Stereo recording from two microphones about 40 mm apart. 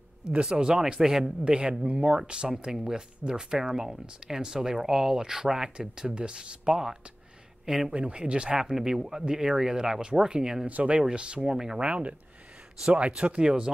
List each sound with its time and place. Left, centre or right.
0.4 s speech: centre
1.0 s speech: centre
1.4 s speech: right
7.9 s speech: right
10.7 s speech: right
11.0 s speech: right
11.4 s speech: centre
11.8 s speech: right
13.4 s speech: centre